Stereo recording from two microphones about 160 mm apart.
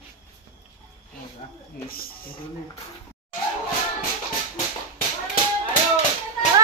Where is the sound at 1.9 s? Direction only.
65° left (ahead or behind).